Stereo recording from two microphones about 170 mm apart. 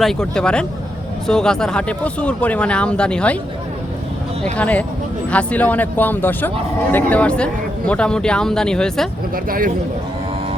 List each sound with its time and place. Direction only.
0.0 s speech: 5° left (ahead or behind)
4.5 s speech: 10° left (ahead or behind)
9.3 s speech: 55° right (ahead or behind)